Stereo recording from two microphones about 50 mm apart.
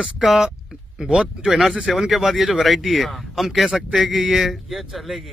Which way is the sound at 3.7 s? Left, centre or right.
Right.